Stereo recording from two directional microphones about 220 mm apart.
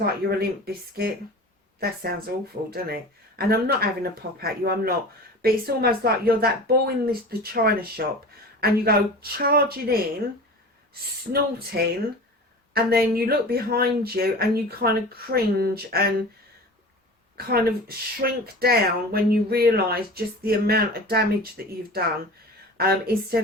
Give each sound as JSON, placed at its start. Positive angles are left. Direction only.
{"t": 0.0, "sound": "speech", "side_deg": -45}
{"t": 11.7, "sound": "speech", "side_deg": -50}
{"t": 17.3, "sound": "speech", "side_deg": -45}